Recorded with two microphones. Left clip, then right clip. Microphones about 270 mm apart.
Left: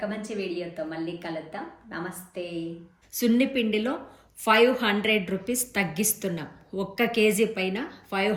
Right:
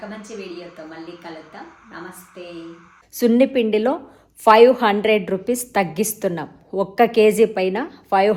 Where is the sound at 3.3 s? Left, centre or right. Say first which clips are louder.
Right 9 dB; centre.